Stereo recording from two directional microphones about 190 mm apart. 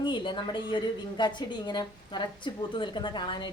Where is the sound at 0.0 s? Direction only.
25° left (ahead or behind).